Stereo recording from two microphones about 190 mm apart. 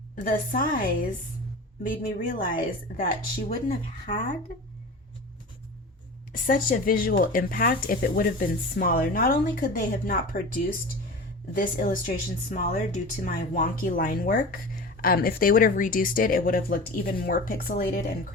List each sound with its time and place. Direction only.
0.2 s speech: 45° left (ahead or behind)
6.3 s speech: 45° left (ahead or behind)